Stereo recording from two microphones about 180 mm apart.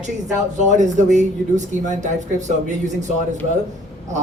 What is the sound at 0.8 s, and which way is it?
Speech, 40° right (ahead or behind).